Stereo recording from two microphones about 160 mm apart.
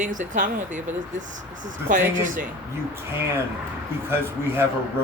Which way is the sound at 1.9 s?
55° right (ahead or behind).